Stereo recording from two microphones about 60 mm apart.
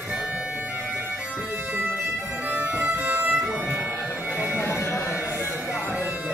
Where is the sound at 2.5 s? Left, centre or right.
Right.